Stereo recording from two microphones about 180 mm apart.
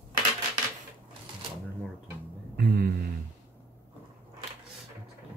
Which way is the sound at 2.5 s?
55° right (ahead or behind).